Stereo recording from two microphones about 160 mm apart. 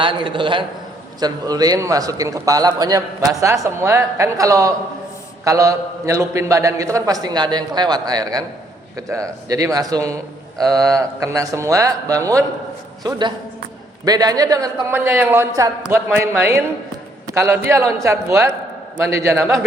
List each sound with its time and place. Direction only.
0.0 s a man's voice: 30° right (ahead or behind)